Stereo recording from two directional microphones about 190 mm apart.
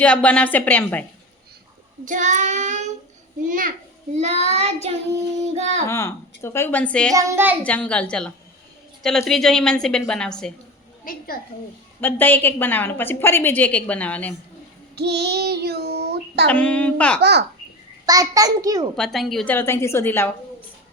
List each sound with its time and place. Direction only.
0.0 s a woman's voice: 5° left (ahead or behind)
2.0 s child singing: 40° right (ahead or behind)
3.4 s a child's voice: 45° right (ahead or behind)
4.1 s child singing: 35° right (ahead or behind)
5.9 s a woman's voice: 15° left (ahead or behind)
7.1 s a woman's voice: 15° right (ahead or behind)
7.6 s a woman's voice: 5° left (ahead or behind)
11.1 s a woman's voice: 45° left (ahead or behind)
11.9 s a woman's voice: 10° left (ahead or behind)
14.9 s child singing: 60° right (ahead or behind)
16.5 s a woman's voice: 5° left (ahead or behind)
17.2 s child singing: 60° right (ahead or behind)
18.0 s a child's voice: 20° right (ahead or behind)
18.9 s a woman's voice: centre (ahead or behind)